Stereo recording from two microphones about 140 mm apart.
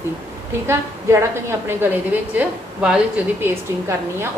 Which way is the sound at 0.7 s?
20° right (ahead or behind).